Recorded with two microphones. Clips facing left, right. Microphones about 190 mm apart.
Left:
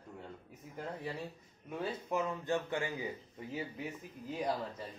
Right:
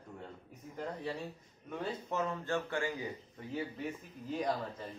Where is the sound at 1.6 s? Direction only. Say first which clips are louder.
Even; 15° left (ahead or behind).